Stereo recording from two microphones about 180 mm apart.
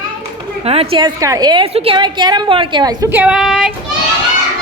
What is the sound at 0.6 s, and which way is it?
A woman's voice, 35° right (ahead or behind).